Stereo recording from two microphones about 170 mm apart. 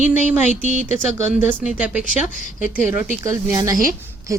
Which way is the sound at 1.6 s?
10° right (ahead or behind).